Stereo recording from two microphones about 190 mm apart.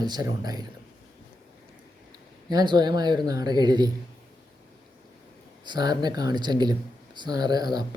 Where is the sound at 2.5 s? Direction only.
20° right (ahead or behind).